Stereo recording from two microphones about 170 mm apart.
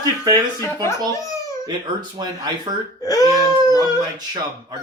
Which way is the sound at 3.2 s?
20° right (ahead or behind).